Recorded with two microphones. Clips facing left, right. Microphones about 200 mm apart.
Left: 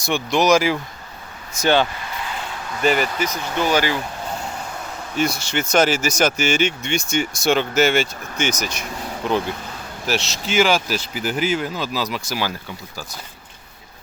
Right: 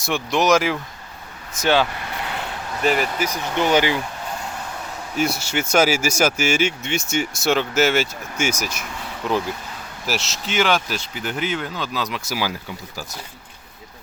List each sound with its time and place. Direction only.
0.0 s speech: centre (ahead or behind)
3.2 s speech: 15° right (ahead or behind)
5.1 s speech: 5° right (ahead or behind)
10.1 s speech: centre (ahead or behind)